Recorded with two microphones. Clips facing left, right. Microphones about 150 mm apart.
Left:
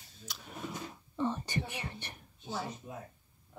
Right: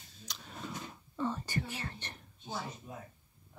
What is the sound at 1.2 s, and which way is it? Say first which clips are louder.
Speech: left 2 dB; 20° left (ahead or behind).